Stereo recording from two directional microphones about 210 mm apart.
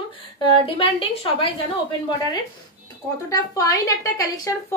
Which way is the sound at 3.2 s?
15° left (ahead or behind).